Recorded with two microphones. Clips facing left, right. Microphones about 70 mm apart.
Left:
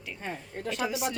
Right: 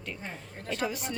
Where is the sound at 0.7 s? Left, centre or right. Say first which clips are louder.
Left 2 dB; centre.